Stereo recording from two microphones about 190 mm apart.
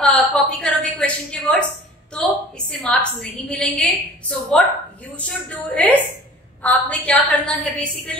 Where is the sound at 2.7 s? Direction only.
5° left (ahead or behind).